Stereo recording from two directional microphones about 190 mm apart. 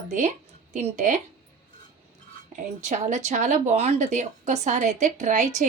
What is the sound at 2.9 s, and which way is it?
A woman's voice, 35° right (ahead or behind).